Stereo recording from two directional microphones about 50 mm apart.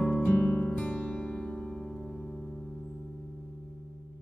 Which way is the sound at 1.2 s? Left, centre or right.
Centre.